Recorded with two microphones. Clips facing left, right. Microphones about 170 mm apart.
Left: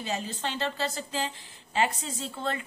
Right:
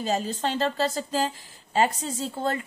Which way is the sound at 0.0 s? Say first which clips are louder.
Right 6 dB; 40° right (ahead or behind).